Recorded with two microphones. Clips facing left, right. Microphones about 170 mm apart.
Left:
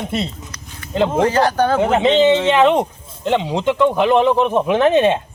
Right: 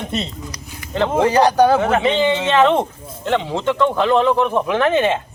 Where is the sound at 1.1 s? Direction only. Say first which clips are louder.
Right 4 dB; 15° right (ahead or behind).